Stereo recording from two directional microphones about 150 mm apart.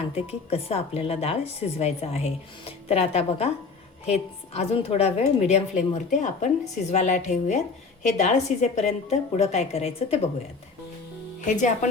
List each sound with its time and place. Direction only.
0.3 s a woman's voice: 40° left (ahead or behind)
11.4 s speech: 55° left (ahead or behind)